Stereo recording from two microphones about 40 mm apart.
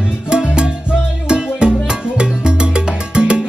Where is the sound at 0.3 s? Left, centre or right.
Right.